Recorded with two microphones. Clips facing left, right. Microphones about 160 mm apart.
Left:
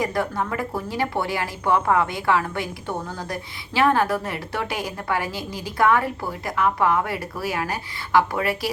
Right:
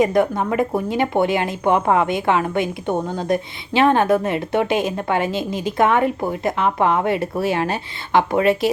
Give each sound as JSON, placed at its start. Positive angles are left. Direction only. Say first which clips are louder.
{"t": 0.0, "sound": "speech", "louder": "right 7 dB", "side_deg": -20}